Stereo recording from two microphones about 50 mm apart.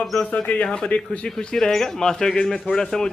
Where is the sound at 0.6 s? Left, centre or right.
Centre.